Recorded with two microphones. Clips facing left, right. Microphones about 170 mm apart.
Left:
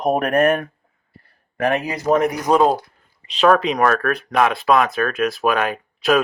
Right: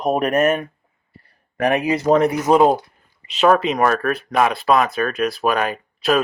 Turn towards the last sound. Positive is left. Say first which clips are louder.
# left 1 dB
turn(degrees=0)  # may be behind; listen again after turning